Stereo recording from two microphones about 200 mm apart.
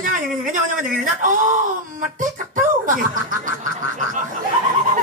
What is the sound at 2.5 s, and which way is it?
Speech, 40° right (ahead or behind).